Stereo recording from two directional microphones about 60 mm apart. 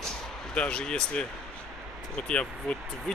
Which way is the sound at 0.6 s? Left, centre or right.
Centre.